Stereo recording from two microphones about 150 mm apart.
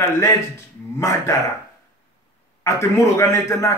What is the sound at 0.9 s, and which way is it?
Speech, 20° left (ahead or behind).